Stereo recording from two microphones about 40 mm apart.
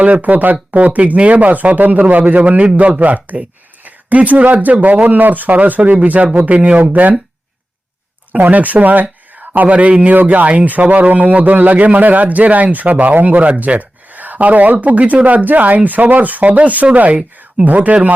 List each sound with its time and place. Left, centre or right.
0.0 s speech: right
8.4 s speech: right